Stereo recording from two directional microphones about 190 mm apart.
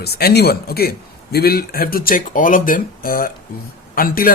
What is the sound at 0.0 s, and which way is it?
A man's voice, 55° left (ahead or behind).